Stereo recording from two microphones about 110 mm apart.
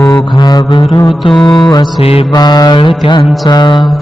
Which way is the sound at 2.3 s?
40° left (ahead or behind).